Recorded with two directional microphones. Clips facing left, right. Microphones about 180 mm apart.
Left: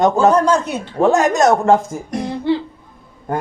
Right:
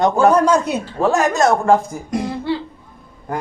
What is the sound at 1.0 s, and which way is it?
Speech, 20° left (ahead or behind).